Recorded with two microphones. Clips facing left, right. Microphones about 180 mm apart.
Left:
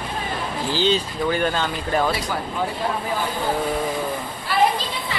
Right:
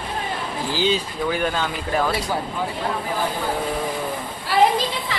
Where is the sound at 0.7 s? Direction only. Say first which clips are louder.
Left 1 dB; 10° right (ahead or behind).